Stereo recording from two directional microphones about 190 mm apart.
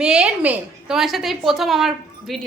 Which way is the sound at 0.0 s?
5° right (ahead or behind).